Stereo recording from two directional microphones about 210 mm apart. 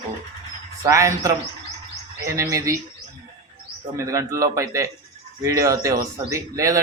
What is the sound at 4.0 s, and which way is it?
A man's voice, 15° right (ahead or behind).